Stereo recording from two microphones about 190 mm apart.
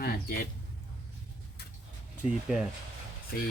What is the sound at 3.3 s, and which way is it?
Speech, 55° left (ahead or behind).